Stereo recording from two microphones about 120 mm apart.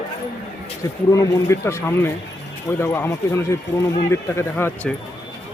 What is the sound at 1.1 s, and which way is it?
A man's voice, 25° left (ahead or behind).